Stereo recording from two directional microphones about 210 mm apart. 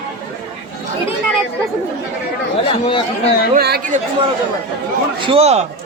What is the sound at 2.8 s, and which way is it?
Speech, 25° left (ahead or behind).